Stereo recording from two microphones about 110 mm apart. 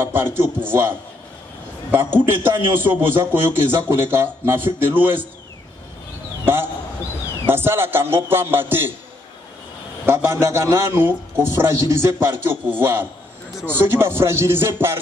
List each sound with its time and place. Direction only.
0.0 s a man's voice: 20° right (ahead or behind)
2.0 s a man's voice: 20° right (ahead or behind)
6.4 s a sound: 20° right (ahead or behind)
7.4 s a man's voice: 20° right (ahead or behind)
10.0 s a man's voice: 20° right (ahead or behind)